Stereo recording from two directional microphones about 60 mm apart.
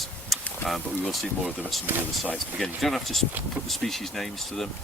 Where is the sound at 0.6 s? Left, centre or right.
Left.